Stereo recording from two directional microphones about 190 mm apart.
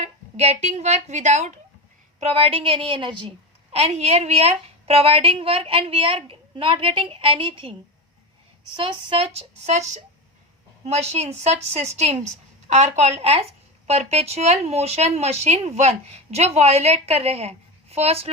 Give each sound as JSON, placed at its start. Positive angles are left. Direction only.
{"t": 0.0, "sound": "a woman's voice", "side_deg": -35}